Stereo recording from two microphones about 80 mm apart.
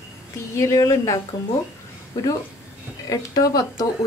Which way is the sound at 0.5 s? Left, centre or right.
Left.